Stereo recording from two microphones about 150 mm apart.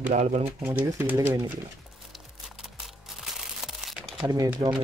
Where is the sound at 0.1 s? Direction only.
50° right (ahead or behind).